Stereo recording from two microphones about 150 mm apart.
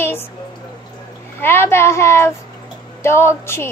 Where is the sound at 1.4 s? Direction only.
15° left (ahead or behind).